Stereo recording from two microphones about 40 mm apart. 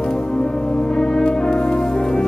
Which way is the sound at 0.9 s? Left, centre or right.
Centre.